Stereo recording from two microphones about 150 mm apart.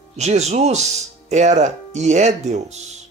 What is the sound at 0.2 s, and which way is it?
Speech, 45° right (ahead or behind).